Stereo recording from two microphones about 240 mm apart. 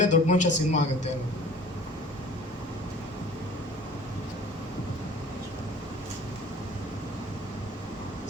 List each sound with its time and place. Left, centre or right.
0.0 s a man's voice: left